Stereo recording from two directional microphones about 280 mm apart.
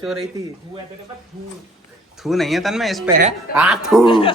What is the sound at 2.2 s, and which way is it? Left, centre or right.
Speech, centre.